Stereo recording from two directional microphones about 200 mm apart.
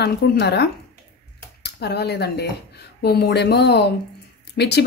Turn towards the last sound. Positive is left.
turn(degrees=55)  # may be behind; listen again after turning